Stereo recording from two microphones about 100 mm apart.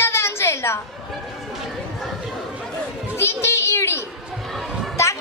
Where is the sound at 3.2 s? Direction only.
25° left (ahead or behind).